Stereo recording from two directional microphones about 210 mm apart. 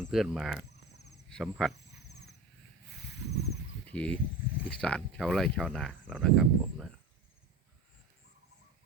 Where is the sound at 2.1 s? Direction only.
55° left (ahead or behind).